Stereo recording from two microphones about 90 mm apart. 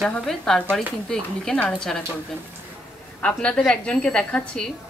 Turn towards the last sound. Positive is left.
turn(degrees=10)  # may be behind; listen again after turning